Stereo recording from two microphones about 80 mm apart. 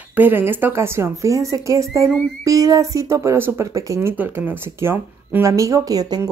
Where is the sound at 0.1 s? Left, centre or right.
Right.